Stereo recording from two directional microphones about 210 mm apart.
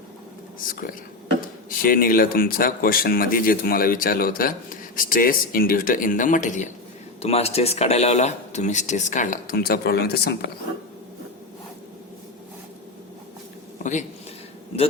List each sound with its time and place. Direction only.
1.4 s speech: 45° left (ahead or behind)